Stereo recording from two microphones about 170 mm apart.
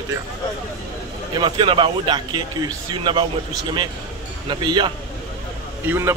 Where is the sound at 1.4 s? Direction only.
30° right (ahead or behind).